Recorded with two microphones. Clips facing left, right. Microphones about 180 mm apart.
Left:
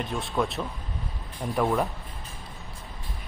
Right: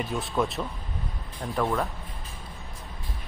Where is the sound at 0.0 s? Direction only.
Centre (ahead or behind).